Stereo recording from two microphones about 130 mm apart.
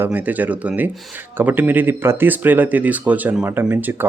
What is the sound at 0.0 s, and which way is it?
Speech, 10° right (ahead or behind).